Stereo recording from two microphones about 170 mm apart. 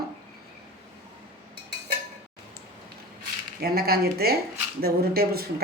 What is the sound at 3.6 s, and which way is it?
Speech, 65° right (ahead or behind).